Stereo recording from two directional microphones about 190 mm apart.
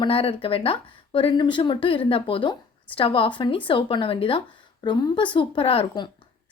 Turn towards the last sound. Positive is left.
turn(degrees=25)  # may be behind; listen again after turning